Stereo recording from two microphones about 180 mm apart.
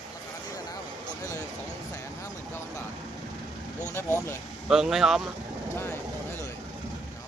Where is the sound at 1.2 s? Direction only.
15° left (ahead or behind).